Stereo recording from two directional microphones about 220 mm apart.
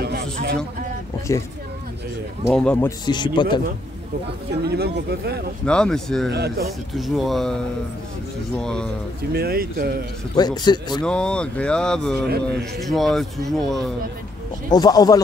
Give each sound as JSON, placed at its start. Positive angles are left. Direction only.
{"t": 0.0, "sound": "a sound", "side_deg": -45}
{"t": 2.5, "sound": "speech", "side_deg": 5}
{"t": 3.1, "sound": "a man's voice", "side_deg": 20}
{"t": 4.6, "sound": "speech", "side_deg": -45}
{"t": 5.7, "sound": "speech", "side_deg": 5}
{"t": 6.3, "sound": "speech", "side_deg": -45}
{"t": 6.9, "sound": "speech", "side_deg": 0}
{"t": 8.5, "sound": "speech", "side_deg": 5}
{"t": 9.3, "sound": "speech", "side_deg": -45}
{"t": 10.3, "sound": "a man's voice", "side_deg": 20}
{"t": 11.1, "sound": "speech", "side_deg": 5}
{"t": 12.3, "sound": "speech", "side_deg": -45}
{"t": 12.8, "sound": "speech", "side_deg": 0}
{"t": 14.7, "sound": "speech", "side_deg": 15}